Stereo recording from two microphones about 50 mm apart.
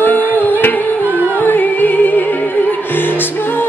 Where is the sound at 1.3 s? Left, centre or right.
Left.